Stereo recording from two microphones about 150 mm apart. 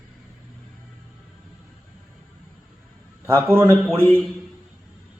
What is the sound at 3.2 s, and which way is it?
Speech, 15° right (ahead or behind).